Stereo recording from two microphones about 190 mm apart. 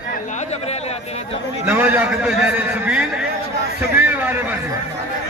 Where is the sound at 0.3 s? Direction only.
35° left (ahead or behind).